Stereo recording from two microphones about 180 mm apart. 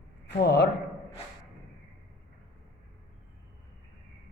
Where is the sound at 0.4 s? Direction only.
65° left (ahead or behind).